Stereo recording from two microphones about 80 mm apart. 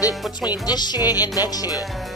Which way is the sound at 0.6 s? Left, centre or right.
Left.